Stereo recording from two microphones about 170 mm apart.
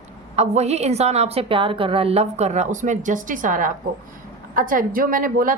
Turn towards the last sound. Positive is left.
turn(degrees=-55)  # may be behind; listen again after turning